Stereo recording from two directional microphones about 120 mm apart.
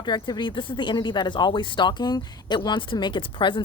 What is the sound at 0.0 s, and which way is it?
A woman's voice, 40° left (ahead or behind).